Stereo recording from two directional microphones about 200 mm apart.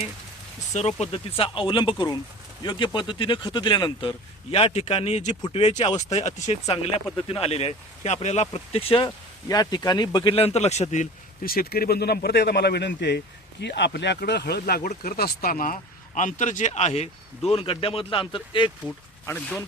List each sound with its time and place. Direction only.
0.7 s speech: 35° left (ahead or behind)
18.9 s speech: 10° left (ahead or behind)